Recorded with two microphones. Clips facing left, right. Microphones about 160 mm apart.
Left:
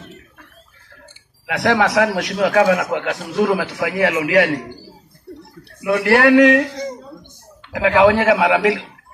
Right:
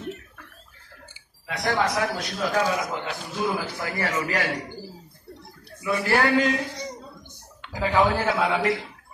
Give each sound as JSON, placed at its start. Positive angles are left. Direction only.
{"t": 1.5, "sound": "a man's voice", "side_deg": 80}
{"t": 5.8, "sound": "a man's voice", "side_deg": 70}
{"t": 7.7, "sound": "a man's voice", "side_deg": 85}